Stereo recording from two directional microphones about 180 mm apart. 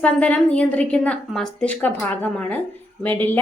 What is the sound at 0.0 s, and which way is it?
Speech, 5° left (ahead or behind).